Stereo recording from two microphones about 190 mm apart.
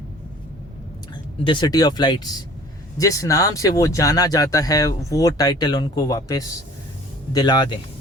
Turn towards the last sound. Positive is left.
turn(degrees=25)  # may be behind; listen again after turning